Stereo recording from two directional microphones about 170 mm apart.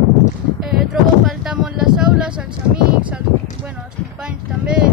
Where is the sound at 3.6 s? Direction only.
5° right (ahead or behind).